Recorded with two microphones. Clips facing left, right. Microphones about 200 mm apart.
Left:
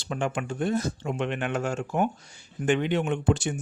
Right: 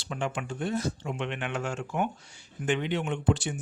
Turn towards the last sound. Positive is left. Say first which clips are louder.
# left 3 dB
turn(degrees=50)  # may be behind; listen again after turning